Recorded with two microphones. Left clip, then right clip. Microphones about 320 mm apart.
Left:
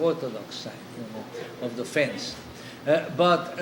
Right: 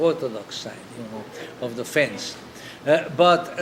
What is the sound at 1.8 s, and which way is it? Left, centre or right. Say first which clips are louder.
A man's voice: right 4 dB; right.